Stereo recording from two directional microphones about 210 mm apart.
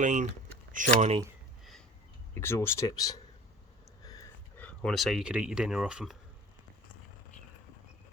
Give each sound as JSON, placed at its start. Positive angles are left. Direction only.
{"t": 0.0, "sound": "speech", "side_deg": -35}
{"t": 2.3, "sound": "speech", "side_deg": 10}